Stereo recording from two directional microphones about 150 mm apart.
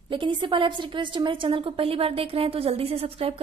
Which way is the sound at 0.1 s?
35° right (ahead or behind).